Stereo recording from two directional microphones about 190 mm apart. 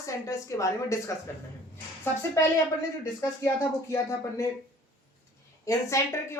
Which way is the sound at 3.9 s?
15° left (ahead or behind).